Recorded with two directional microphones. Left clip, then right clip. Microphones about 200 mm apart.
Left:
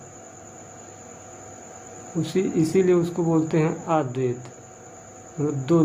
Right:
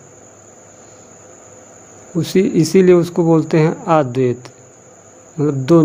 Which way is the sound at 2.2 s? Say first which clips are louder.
Right 8 dB; 35° right (ahead or behind).